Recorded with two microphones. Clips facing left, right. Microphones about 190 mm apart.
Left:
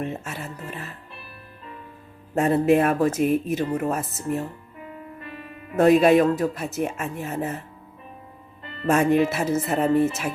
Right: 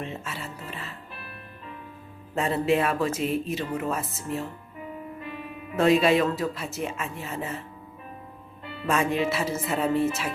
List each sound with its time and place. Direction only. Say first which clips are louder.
0.0 s music: left 4 dB; 50° left (ahead or behind)
2.3 s speech: left 5 dB; 50° left (ahead or behind)
5.7 s speech: left 5 dB; 50° left (ahead or behind)
8.9 s speech: left 6 dB; 50° left (ahead or behind)